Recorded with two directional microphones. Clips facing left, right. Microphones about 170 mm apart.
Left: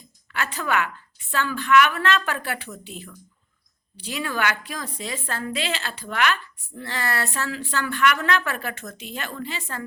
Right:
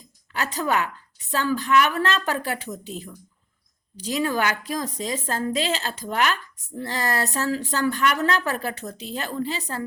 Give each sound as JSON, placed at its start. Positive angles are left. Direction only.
{"t": 0.3, "sound": "a woman's voice", "side_deg": -40}